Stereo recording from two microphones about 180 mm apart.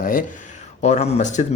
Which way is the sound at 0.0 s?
50° left (ahead or behind).